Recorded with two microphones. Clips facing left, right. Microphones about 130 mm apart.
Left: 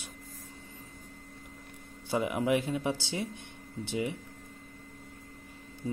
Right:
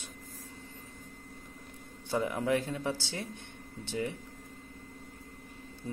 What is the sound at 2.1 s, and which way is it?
Speech, 15° left (ahead or behind).